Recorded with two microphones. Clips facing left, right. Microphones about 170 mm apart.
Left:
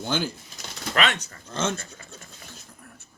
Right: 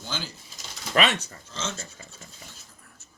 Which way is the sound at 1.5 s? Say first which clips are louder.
Left 8 dB; 55° left (ahead or behind).